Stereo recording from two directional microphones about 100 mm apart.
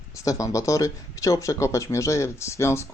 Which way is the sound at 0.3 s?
35° left (ahead or behind).